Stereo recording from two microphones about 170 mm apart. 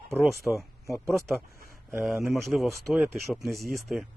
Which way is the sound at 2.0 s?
Centre (ahead or behind).